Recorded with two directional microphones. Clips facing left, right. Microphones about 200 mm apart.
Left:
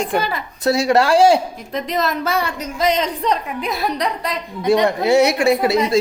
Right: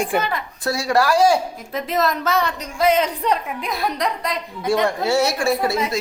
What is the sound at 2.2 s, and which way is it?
Speech, 10° left (ahead or behind).